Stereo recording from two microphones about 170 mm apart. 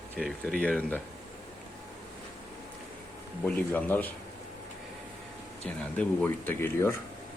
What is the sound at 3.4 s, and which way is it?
Speech, 10° left (ahead or behind).